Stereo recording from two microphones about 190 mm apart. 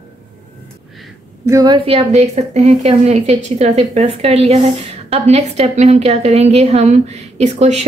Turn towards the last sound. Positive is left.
turn(degrees=-35)  # may be behind; listen again after turning